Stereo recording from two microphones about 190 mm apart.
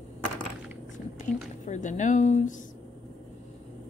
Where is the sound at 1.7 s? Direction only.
40° left (ahead or behind).